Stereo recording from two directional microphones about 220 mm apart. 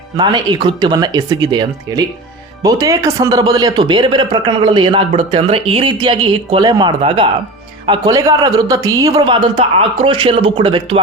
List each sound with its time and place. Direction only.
0.2 s a man's voice: 20° right (ahead or behind)